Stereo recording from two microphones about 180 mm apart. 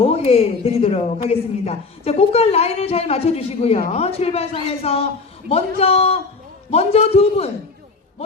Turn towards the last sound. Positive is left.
turn(degrees=35)  # may be behind; listen again after turning